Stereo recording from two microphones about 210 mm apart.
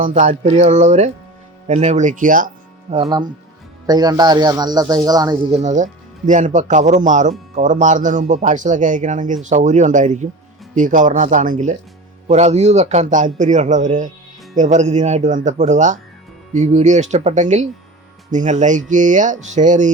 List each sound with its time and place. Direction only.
0.0 s speech: 35° right (ahead or behind)
2.9 s speech: 25° right (ahead or behind)
5.5 s speech: 35° right (ahead or behind)